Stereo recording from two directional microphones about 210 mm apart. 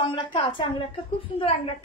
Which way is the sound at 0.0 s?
25° left (ahead or behind).